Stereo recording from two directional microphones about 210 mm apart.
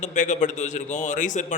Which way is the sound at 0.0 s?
35° left (ahead or behind).